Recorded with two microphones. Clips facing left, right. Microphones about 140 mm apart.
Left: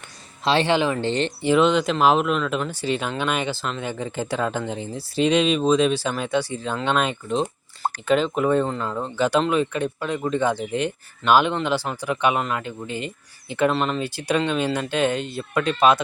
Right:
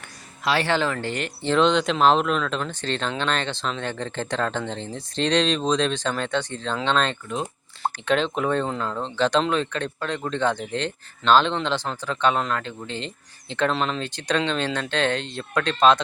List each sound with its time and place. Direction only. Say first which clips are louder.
0.4 s speech: left 3 dB; 20° left (ahead or behind)
1.4 s speech: left 1 dB; 10° left (ahead or behind)